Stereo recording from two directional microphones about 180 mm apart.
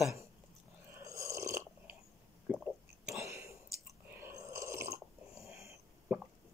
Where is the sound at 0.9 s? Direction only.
15° right (ahead or behind).